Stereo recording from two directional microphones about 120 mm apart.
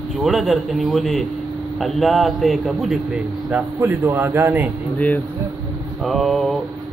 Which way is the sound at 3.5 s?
20° right (ahead or behind).